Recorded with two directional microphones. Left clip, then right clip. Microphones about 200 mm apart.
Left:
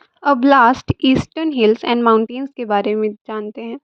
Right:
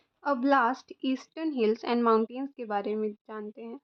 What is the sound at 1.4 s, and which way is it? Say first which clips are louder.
A woman's voice: left 12 dB; 35° left (ahead or behind).